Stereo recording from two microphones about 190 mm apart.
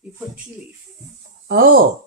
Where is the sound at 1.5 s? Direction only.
50° right (ahead or behind).